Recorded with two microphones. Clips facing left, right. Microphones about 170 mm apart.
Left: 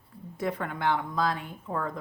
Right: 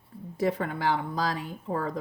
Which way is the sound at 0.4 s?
35° right (ahead or behind).